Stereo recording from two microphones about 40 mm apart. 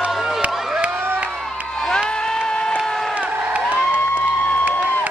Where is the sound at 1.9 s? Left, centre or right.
Centre.